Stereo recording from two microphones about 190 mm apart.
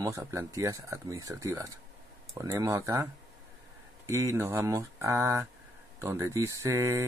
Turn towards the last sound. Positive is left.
turn(degrees=-15)  # may be behind; listen again after turning